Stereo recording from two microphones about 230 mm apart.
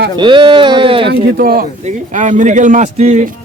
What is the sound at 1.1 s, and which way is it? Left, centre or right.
Speech, right.